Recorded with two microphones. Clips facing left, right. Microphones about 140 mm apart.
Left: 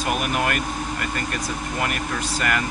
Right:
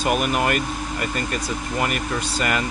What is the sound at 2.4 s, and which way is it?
Speech, 20° right (ahead or behind).